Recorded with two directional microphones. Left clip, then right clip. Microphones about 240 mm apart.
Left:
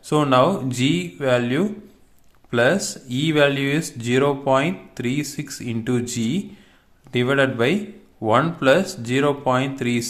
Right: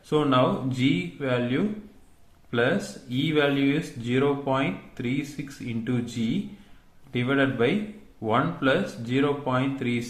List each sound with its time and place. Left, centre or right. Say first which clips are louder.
0.1 s speech: left 5 dB; left